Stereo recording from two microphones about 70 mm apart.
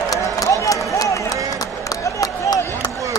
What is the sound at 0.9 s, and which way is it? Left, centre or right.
Run, left.